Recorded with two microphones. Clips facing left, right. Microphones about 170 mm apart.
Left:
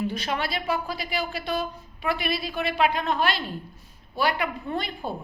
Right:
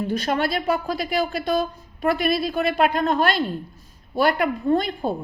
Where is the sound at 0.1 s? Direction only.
45° right (ahead or behind).